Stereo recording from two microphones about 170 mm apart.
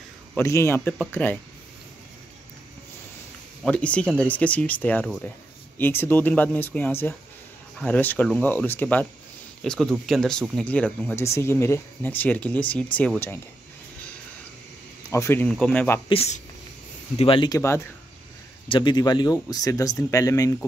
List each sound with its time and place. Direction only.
0.4 s speech: 15° left (ahead or behind)
3.6 s speech: 5° left (ahead or behind)
15.0 s speech: 15° left (ahead or behind)
16.1 s speech: 35° left (ahead or behind)
17.5 s speech: 15° left (ahead or behind)
18.7 s speech: 30° left (ahead or behind)